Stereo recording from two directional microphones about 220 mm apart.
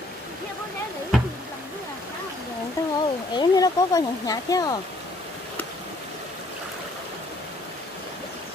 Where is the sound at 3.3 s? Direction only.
15° left (ahead or behind).